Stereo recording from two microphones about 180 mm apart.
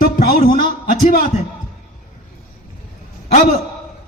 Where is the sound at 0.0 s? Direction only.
55° left (ahead or behind).